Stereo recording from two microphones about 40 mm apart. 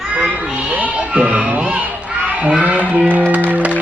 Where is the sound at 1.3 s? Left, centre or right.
Right.